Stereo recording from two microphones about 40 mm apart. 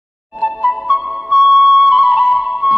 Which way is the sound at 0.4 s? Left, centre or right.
Right.